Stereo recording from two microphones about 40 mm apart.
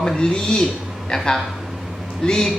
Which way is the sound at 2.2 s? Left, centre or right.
Centre.